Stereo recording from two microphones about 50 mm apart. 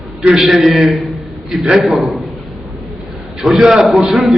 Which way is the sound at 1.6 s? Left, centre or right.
Right.